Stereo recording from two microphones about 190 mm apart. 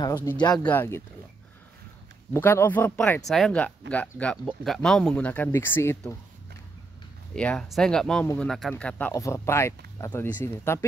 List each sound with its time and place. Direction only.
0.0 s a sound: 20° left (ahead or behind)
0.4 s speech: 20° left (ahead or behind)
2.3 s speech: 10° left (ahead or behind)
7.3 s speech: 5° left (ahead or behind)